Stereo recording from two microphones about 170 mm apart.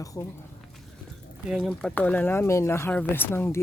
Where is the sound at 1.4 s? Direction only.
Centre (ahead or behind); by 3.6 s 15° left (ahead or behind).